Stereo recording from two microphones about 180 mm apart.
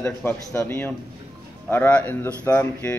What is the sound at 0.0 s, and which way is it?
A man's voice, 15° left (ahead or behind).